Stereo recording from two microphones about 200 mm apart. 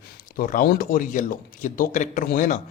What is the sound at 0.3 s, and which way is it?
A man's voice, 45° left (ahead or behind).